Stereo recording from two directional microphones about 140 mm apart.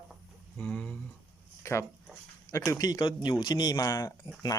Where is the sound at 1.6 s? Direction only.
20° left (ahead or behind).